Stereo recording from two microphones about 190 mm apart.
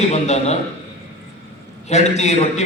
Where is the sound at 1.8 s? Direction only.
35° left (ahead or behind).